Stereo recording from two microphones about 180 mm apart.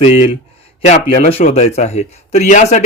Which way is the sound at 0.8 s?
45° left (ahead or behind).